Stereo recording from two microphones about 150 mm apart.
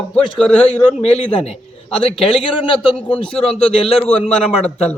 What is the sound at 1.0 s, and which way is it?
A man's voice, 45° left (ahead or behind).